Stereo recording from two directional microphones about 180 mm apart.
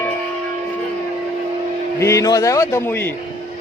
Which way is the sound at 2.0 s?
15° left (ahead or behind).